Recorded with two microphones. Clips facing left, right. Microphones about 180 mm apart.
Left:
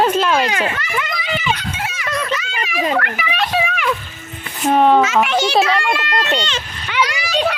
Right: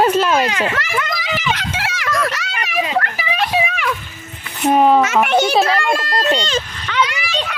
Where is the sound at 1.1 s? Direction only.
90° right.